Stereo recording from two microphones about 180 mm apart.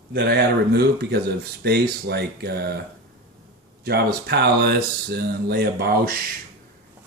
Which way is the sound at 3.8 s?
60° right (ahead or behind).